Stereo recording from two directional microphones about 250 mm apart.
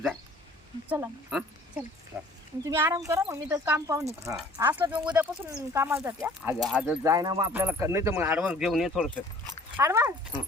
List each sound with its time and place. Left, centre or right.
0.9 s speech: centre